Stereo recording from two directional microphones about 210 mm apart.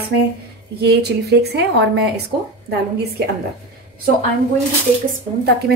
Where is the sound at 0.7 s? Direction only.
50° right (ahead or behind).